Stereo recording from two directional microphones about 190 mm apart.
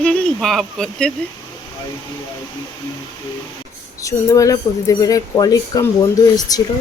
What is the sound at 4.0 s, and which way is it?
Speech, 15° left (ahead or behind).